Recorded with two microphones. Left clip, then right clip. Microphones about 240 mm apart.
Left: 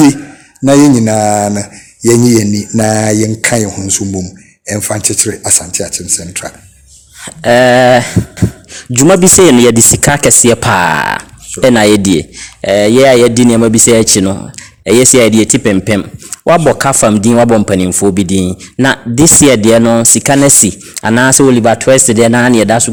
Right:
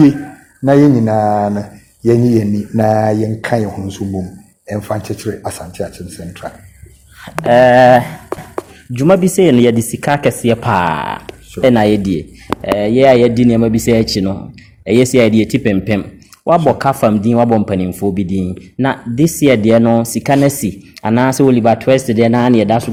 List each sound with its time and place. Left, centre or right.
0.6 s speech: left
7.4 s speech: left